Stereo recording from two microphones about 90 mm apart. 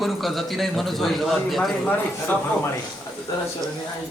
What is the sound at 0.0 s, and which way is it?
A man's voice, centre (ahead or behind).